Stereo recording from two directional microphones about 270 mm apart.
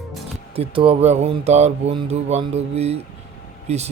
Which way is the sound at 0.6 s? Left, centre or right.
Centre.